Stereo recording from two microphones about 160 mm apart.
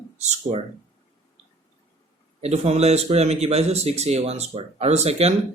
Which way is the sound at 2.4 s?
40° right (ahead or behind).